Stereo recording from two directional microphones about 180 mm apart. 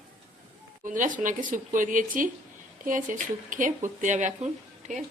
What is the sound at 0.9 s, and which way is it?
Speech, 45° right (ahead or behind).